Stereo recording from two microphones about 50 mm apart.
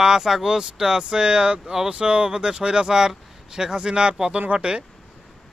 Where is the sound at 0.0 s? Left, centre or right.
Centre.